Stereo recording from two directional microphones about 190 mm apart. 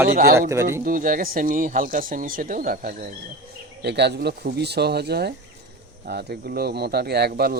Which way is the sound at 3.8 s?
65° right (ahead or behind).